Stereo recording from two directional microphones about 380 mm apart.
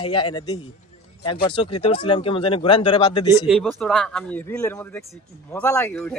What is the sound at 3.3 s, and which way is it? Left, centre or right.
A man's voice, centre.